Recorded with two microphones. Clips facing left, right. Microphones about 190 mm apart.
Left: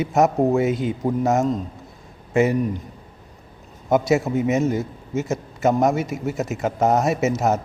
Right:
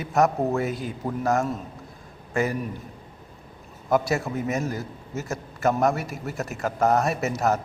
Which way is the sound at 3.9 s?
20° left (ahead or behind).